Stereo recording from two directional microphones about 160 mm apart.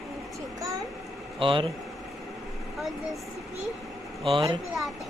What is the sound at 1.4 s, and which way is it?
Speech, 30° right (ahead or behind).